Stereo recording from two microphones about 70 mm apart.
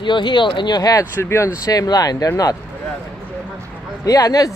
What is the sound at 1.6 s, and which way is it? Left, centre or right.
Speech, left.